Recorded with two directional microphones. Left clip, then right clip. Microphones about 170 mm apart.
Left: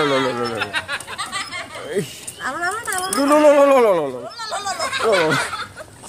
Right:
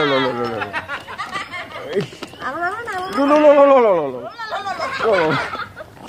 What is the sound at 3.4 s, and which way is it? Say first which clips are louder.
Speech: right 2 dB; centre (ahead or behind).